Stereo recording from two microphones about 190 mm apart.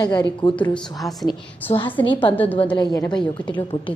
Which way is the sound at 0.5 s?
5° left (ahead or behind).